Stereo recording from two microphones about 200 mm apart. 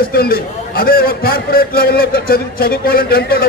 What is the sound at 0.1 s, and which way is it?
A man's voice, 50° left (ahead or behind).